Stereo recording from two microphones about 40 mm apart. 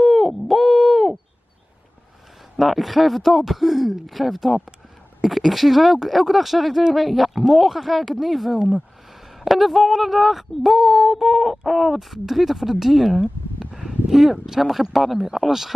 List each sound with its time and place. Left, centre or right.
0.0 s wail: centre
2.6 s speech: centre
8.5 s speech: centre
9.4 s speech: centre
13.2 s a sound: right
14.1 s speech: centre